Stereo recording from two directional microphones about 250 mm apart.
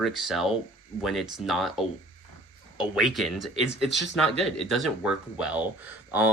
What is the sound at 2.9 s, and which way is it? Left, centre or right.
Speech, centre.